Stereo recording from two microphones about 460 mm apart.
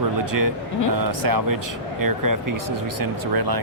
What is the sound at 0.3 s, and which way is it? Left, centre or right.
Speech, right.